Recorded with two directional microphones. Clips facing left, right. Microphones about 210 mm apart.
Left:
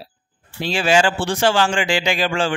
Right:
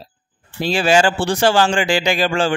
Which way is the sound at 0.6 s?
40° right (ahead or behind).